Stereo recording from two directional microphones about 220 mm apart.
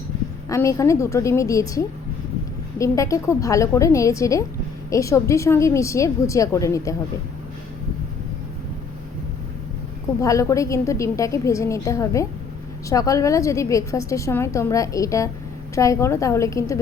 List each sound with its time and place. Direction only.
0.4 s a woman's voice: 15° left (ahead or behind)
10.2 s a woman's voice: 15° left (ahead or behind)